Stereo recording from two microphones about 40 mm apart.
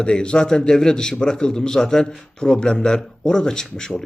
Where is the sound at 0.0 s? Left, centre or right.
Left.